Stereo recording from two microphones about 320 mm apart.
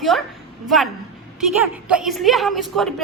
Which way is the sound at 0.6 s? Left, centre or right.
Centre.